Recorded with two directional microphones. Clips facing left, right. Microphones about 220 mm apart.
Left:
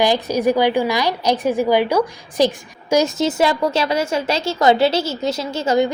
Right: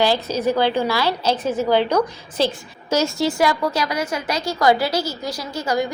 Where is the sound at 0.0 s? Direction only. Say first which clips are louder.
Left 2 dB; 15° left (ahead or behind).